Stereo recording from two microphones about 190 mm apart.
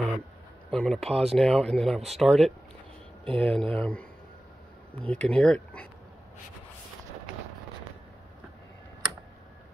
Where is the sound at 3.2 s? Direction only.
30° right (ahead or behind).